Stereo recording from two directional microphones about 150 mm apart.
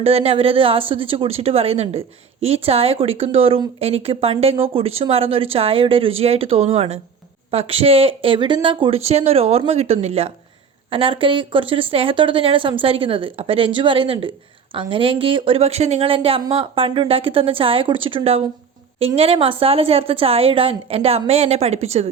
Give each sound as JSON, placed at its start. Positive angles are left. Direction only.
{"t": 0.0, "sound": "speech", "side_deg": -40}